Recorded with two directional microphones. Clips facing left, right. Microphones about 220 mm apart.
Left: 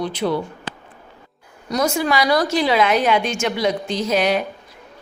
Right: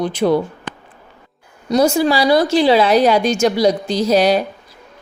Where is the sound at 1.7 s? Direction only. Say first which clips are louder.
Right 6 dB; 30° right (ahead or behind).